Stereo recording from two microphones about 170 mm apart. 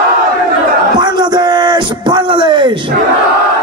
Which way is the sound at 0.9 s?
25° right (ahead or behind).